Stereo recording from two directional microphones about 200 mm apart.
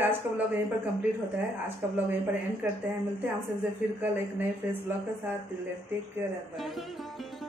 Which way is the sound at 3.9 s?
10° right (ahead or behind).